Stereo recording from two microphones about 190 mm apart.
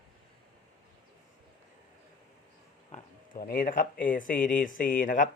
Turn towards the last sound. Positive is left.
turn(degrees=45)  # may be behind; listen again after turning